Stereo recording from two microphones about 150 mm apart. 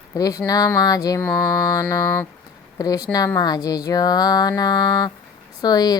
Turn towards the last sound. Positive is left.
turn(degrees=25)  # may be behind; listen again after turning